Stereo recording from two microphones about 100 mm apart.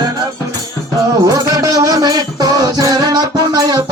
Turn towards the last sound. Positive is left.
turn(degrees=-40)  # may be behind; listen again after turning